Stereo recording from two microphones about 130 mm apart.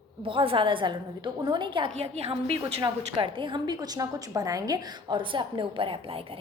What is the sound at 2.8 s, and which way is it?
A woman's voice, 40° right (ahead or behind).